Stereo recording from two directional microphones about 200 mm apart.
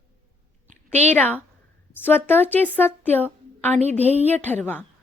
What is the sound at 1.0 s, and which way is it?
Speech, 10° left (ahead or behind).